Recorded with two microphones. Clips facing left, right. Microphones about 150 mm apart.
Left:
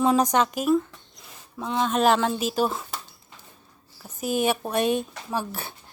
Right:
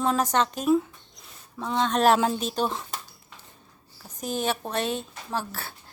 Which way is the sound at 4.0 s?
10° left (ahead or behind).